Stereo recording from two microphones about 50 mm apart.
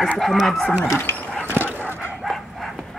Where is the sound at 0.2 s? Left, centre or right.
Centre.